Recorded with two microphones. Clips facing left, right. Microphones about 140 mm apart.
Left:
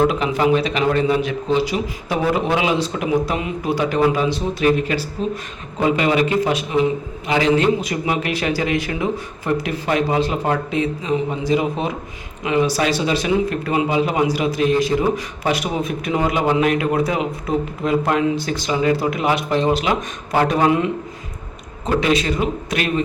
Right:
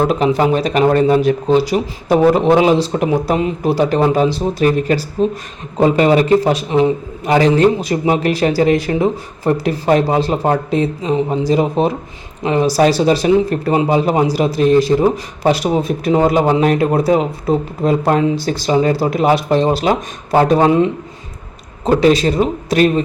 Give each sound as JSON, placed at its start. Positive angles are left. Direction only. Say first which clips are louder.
{"t": 0.1, "sound": "speech", "louder": "right 4 dB", "side_deg": -40}